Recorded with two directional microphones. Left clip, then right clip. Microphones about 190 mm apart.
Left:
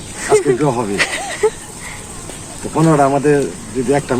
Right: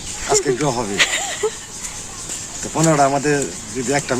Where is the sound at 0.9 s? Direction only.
5° left (ahead or behind).